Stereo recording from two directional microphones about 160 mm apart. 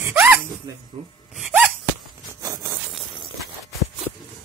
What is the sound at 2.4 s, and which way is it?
Sawing, 20° right (ahead or behind).